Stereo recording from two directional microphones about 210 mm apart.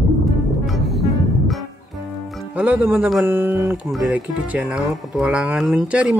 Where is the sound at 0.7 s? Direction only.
Centre (ahead or behind).